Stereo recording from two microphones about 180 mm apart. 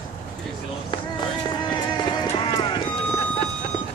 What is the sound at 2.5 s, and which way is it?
Clip-clop, 25° left (ahead or behind).